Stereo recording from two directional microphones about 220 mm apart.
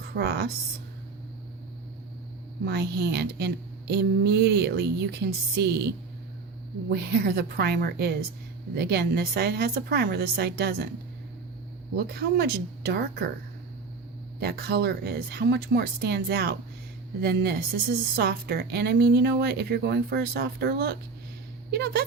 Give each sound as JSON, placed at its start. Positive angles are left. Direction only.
{"t": 0.1, "sound": "a sound", "side_deg": -50}
{"t": 2.6, "sound": "a woman's voice", "side_deg": -50}
{"t": 6.9, "sound": "a woman's voice", "side_deg": -45}
{"t": 11.9, "sound": "a woman's voice", "side_deg": -45}
{"t": 14.4, "sound": "a woman's voice", "side_deg": -45}